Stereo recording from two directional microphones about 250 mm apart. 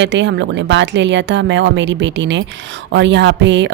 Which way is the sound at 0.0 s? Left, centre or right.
Right.